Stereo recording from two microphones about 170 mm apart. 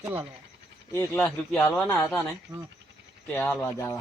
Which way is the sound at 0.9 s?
15° left (ahead or behind).